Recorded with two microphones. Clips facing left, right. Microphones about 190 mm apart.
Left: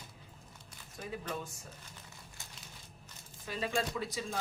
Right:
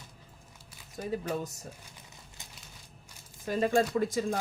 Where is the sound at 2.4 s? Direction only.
20° right (ahead or behind).